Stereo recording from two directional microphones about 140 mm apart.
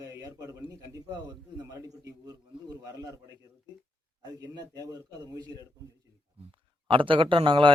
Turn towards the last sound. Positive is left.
turn(degrees=-35)  # may be behind; listen again after turning